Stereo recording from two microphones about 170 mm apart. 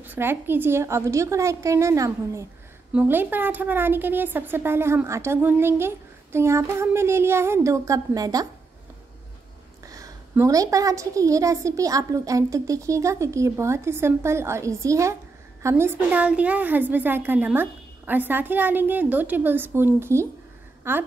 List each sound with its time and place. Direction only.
0.0 s a woman's voice: 10° right (ahead or behind)
9.8 s a woman's voice: 20° right (ahead or behind)